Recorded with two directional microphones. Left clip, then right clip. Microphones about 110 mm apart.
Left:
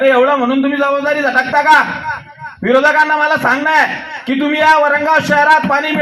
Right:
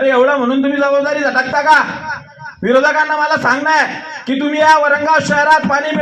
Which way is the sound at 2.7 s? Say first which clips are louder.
Left 2 dB; 45° left (ahead or behind).